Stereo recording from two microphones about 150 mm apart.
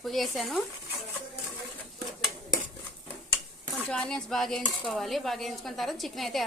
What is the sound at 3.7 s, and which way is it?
Speech, 5° left (ahead or behind).